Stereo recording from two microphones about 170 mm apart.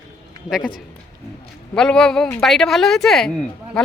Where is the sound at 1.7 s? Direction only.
5° left (ahead or behind).